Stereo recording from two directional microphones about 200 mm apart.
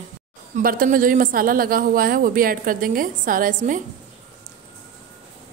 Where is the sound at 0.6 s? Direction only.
45° right (ahead or behind).